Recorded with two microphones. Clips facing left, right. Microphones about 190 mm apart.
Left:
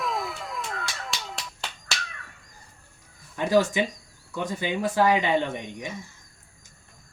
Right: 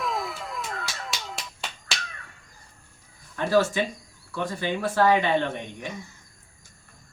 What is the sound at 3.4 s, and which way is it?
Speech, 15° left (ahead or behind).